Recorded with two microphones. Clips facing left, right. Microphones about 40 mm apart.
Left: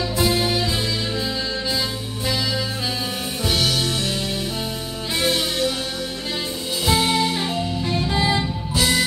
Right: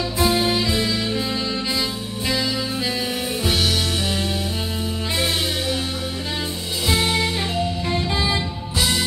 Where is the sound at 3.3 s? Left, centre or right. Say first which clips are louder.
Left 1 dB; centre.